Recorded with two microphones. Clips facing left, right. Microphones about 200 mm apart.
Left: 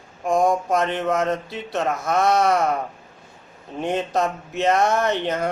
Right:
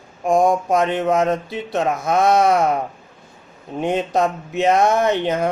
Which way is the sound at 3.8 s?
15° right (ahead or behind).